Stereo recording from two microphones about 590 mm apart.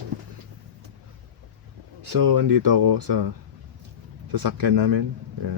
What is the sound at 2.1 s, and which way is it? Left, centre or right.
Speech, right.